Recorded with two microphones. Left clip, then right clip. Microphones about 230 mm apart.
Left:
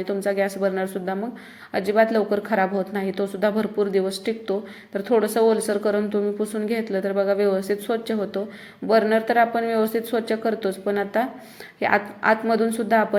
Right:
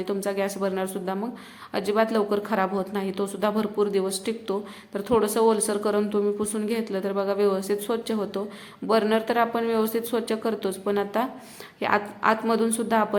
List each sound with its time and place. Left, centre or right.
0.0 s speech: centre